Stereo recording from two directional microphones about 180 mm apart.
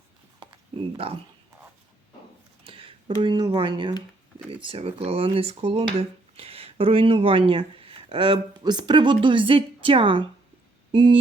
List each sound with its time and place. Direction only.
0.9 s speech: 30° right (ahead or behind)
2.6 s speech: 30° right (ahead or behind)
10.9 s a sound: 25° right (ahead or behind)